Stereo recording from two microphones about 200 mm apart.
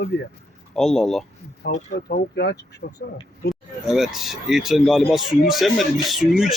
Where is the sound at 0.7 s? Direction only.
Centre (ahead or behind).